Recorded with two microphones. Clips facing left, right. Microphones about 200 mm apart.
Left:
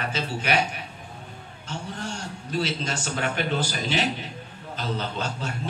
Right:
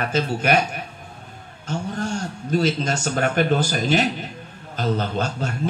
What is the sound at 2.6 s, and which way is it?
Speech, 45° right (ahead or behind).